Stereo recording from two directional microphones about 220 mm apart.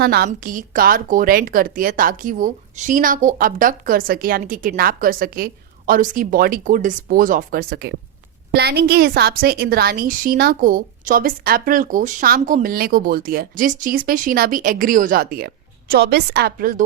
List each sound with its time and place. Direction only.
0.0 s a woman's voice: 45° right (ahead or behind)